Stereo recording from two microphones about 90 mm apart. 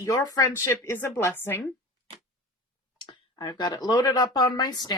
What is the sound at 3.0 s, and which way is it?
Speech, 55° left (ahead or behind).